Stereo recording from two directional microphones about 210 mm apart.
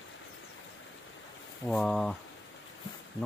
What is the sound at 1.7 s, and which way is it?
Speech, 5° left (ahead or behind).